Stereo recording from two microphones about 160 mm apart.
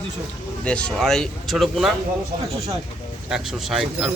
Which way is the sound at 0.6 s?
5° left (ahead or behind).